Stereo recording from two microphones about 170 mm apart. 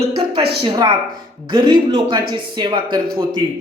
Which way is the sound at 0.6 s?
25° right (ahead or behind).